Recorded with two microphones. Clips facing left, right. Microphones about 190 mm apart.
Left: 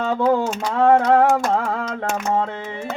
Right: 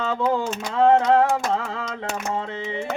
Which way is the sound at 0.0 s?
55° left (ahead or behind).